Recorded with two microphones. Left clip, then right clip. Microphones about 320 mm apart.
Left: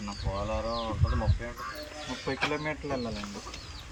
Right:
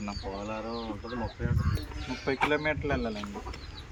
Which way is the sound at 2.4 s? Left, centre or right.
Centre.